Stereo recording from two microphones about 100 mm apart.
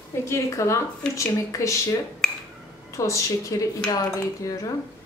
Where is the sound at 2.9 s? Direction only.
30° left (ahead or behind).